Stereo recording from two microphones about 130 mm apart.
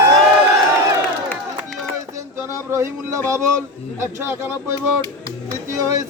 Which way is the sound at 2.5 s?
20° right (ahead or behind).